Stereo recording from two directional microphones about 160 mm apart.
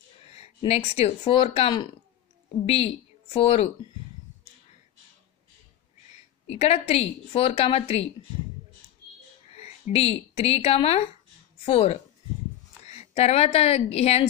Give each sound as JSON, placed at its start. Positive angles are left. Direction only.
{"t": 0.6, "sound": "a woman's voice", "side_deg": 40}
{"t": 6.4, "sound": "a woman's voice", "side_deg": 40}
{"t": 9.5, "sound": "a woman's voice", "side_deg": 40}